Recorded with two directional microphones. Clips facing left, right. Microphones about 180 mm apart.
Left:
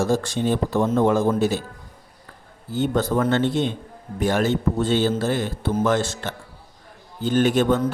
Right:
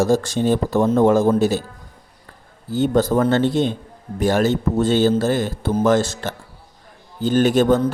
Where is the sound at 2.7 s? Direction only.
35° right (ahead or behind).